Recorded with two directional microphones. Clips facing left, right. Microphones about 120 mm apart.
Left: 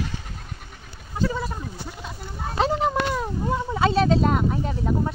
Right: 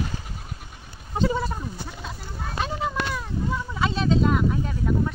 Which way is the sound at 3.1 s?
35° left (ahead or behind).